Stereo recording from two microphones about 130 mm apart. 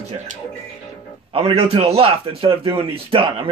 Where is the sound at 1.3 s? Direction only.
45° right (ahead or behind).